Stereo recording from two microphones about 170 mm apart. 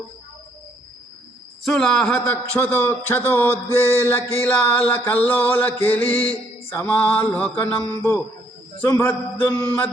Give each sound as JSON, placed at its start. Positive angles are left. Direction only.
{"t": 1.6, "sound": "music", "side_deg": 0}
{"t": 7.9, "sound": "a man's voice", "side_deg": 20}
{"t": 8.8, "sound": "music", "side_deg": 10}